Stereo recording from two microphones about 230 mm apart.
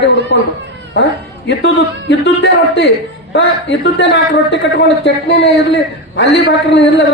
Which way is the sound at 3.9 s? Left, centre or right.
Left.